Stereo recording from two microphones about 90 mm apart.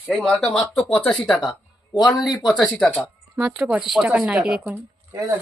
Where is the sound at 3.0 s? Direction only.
10° right (ahead or behind).